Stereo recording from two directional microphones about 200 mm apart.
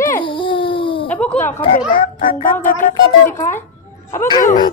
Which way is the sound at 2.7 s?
40° left (ahead or behind).